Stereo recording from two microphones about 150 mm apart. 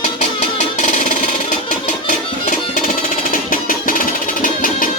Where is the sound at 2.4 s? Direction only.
55° left (ahead or behind).